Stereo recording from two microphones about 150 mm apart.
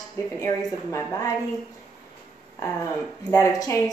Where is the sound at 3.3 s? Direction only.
20° left (ahead or behind).